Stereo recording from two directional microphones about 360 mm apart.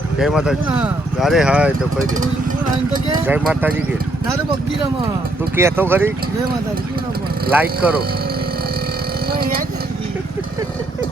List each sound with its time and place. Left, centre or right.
0.2 s speech: centre
5.5 s speech: centre
7.5 s speech: centre
9.3 s a sound: right